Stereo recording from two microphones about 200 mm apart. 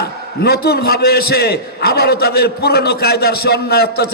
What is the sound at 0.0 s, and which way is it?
A man's voice, 50° left (ahead or behind).